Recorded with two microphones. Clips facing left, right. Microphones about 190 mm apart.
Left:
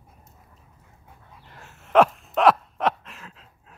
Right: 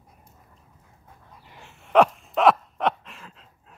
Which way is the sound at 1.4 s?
Centre (ahead or behind).